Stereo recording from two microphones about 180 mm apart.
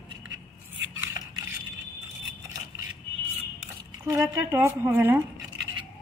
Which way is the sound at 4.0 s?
15° right (ahead or behind).